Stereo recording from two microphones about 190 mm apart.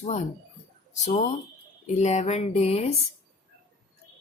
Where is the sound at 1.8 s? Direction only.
35° left (ahead or behind).